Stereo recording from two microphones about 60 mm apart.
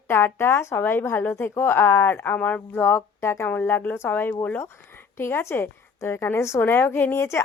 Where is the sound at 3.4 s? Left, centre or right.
Left.